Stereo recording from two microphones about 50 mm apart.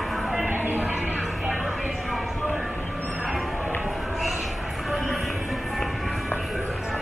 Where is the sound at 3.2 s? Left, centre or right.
Centre.